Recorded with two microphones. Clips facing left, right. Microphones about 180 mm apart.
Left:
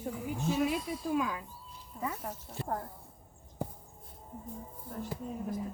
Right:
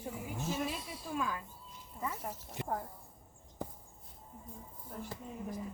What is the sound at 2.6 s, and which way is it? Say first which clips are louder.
Speech: left 1 dB; 15° right (ahead or behind).